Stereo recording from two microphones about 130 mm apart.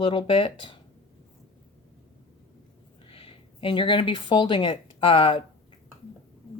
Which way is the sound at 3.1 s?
45° left (ahead or behind).